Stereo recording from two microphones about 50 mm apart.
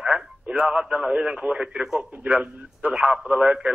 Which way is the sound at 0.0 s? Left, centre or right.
Right.